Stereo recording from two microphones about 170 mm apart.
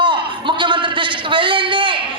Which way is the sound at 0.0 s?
30° right (ahead or behind).